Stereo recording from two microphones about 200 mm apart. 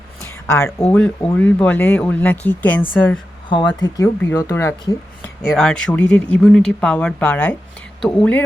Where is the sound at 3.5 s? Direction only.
20° left (ahead or behind).